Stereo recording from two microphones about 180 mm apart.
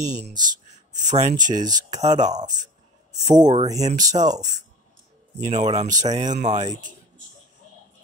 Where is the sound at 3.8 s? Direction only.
40° right (ahead or behind).